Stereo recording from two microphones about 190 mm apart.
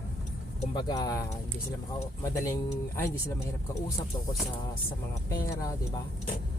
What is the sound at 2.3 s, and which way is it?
Speech, 15° left (ahead or behind).